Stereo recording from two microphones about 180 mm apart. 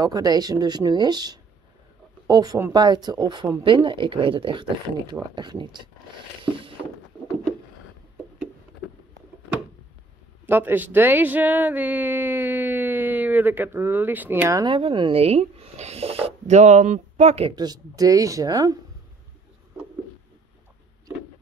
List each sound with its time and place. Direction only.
0.0 s speech: 20° right (ahead or behind)
10.4 s speech: 10° right (ahead or behind)
14.6 s speech: 30° right (ahead or behind)